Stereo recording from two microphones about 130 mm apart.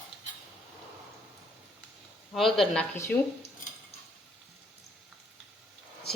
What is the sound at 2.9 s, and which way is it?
Speech, 20° left (ahead or behind).